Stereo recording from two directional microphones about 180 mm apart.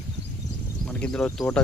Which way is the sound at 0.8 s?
5° left (ahead or behind).